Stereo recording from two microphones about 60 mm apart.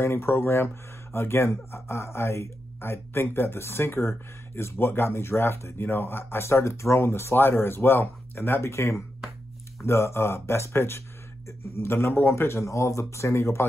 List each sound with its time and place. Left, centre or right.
0.0 s speech: left